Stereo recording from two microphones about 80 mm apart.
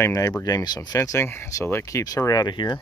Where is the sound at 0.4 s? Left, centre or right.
Left.